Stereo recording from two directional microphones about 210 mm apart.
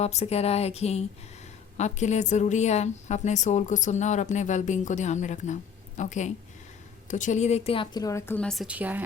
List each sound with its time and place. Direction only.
0.0 s a woman's voice: 30° left (ahead or behind); by 9.0 s 10° right (ahead or behind)